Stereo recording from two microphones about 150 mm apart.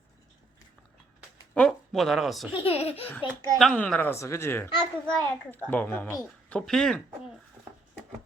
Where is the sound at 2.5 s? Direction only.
40° left (ahead or behind).